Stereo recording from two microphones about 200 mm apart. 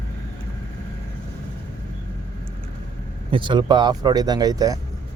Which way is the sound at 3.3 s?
25° right (ahead or behind).